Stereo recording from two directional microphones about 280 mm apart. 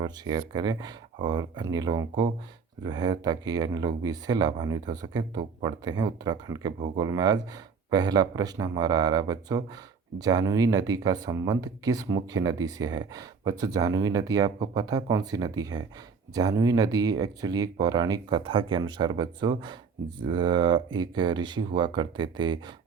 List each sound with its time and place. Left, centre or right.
0.0 s speech: centre